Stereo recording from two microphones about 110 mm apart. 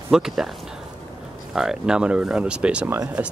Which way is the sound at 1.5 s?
5° right (ahead or behind).